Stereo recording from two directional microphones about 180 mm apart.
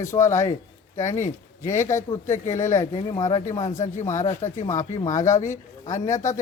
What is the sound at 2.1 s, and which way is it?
Speech, 40° left (ahead or behind).